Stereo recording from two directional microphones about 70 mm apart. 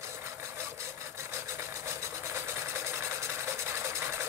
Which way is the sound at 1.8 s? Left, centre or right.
Right.